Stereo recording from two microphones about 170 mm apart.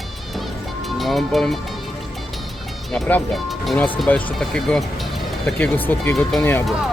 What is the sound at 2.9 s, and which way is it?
Speech, 5° left (ahead or behind).